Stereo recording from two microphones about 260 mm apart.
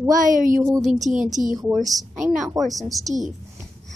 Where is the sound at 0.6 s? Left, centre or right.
Centre.